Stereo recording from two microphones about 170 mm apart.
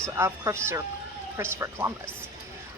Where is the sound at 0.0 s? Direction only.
15° right (ahead or behind).